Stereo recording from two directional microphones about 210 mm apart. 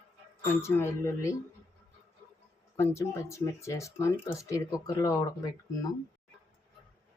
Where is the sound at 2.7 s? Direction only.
10° left (ahead or behind).